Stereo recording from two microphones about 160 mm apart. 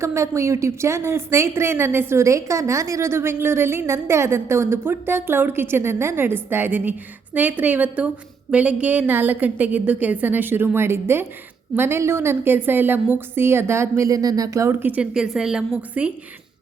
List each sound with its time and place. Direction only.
0.0 s a woman's voice: 20° right (ahead or behind)